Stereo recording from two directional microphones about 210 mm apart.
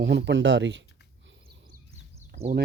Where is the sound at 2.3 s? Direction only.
40° right (ahead or behind).